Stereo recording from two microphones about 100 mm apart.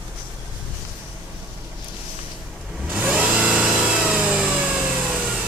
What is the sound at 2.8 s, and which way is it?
Vehicle, 15° right (ahead or behind).